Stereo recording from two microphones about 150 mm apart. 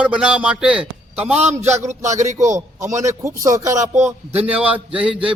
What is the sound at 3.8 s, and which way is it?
Speech, 50° right (ahead or behind).